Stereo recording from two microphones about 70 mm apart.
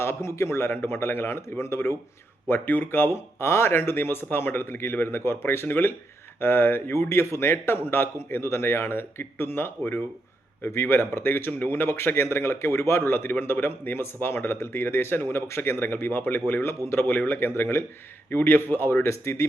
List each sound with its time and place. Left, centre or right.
0.0 s a man's voice: left
2.5 s a man's voice: left